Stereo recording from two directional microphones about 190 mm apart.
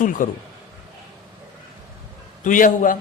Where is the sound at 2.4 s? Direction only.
45° left (ahead or behind).